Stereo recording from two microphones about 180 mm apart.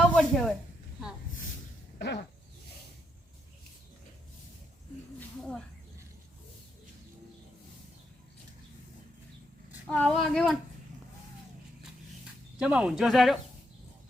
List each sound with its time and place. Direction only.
0.1 s speech: 5° left (ahead or behind)
2.0 s a sound: 75° left (ahead or behind)
9.8 s speech: 5° left (ahead or behind)
12.5 s speech: 5° right (ahead or behind)